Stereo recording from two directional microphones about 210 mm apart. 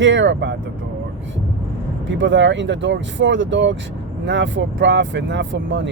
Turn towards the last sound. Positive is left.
turn(degrees=-60)  # may be behind; listen again after turning